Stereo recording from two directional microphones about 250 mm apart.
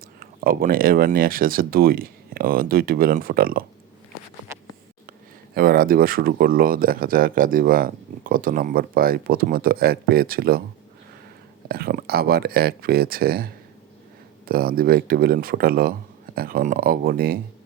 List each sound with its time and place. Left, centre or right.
0.2 s speech: right
5.5 s speech: right
11.7 s speech: right